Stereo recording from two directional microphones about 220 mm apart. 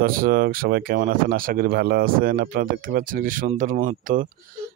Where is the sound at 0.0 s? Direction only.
40° right (ahead or behind).